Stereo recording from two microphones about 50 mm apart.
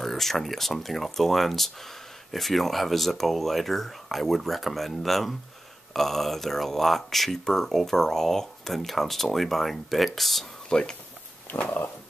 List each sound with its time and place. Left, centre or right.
0.0 s speech: centre
10.7 s speech: centre
11.5 s a sound: left